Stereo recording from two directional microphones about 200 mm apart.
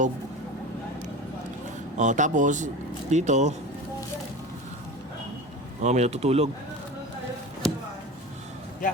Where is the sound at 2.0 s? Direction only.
40° right (ahead or behind).